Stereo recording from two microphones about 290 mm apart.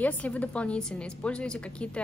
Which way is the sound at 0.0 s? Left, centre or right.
Centre.